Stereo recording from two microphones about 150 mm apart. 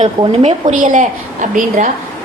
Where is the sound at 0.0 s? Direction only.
50° right (ahead or behind).